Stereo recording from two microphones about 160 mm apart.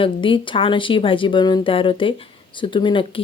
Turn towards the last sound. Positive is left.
turn(degrees=30)  # may be behind; listen again after turning